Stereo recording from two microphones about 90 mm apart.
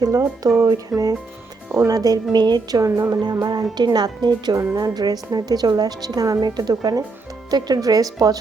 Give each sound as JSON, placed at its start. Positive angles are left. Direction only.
{"t": 0.0, "sound": "speech", "side_deg": -40}